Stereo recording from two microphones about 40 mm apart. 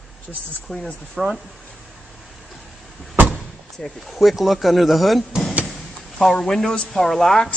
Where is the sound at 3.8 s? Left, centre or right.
Centre.